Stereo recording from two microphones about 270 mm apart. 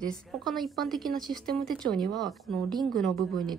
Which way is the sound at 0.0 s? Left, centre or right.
Centre.